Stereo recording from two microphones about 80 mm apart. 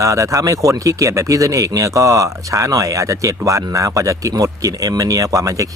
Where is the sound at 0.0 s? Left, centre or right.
Right.